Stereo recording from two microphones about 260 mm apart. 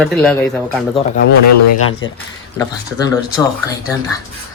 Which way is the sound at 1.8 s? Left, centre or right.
Left.